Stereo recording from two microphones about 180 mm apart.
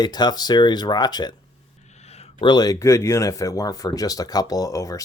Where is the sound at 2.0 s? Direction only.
35° left (ahead or behind).